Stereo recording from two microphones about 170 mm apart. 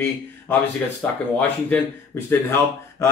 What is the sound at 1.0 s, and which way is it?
Speech, 5° left (ahead or behind).